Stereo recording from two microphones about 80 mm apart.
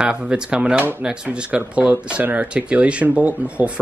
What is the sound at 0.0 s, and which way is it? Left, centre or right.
Speech, centre.